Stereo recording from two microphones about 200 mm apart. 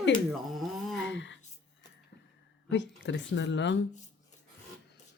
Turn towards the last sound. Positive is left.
turn(degrees=60)  # may be behind; listen again after turning